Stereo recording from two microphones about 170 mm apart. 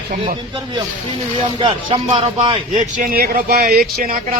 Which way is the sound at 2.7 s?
50° right (ahead or behind).